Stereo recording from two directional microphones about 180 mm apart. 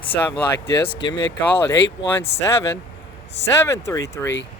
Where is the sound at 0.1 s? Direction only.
30° left (ahead or behind).